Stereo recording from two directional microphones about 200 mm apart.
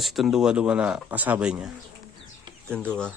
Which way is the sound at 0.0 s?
Centre (ahead or behind).